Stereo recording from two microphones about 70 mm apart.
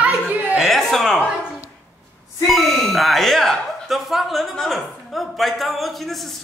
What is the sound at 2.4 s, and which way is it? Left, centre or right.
Speech, centre.